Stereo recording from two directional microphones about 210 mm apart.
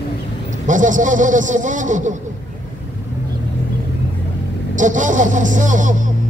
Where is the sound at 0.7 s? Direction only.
35° right (ahead or behind).